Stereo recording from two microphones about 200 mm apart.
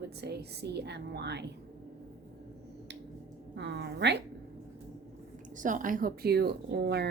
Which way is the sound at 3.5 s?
60° right (ahead or behind).